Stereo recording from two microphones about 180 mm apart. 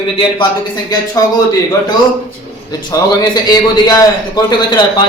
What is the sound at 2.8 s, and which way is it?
A man's voice, 20° left (ahead or behind).